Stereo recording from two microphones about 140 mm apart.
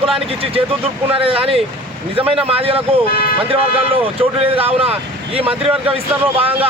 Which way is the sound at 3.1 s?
90° left.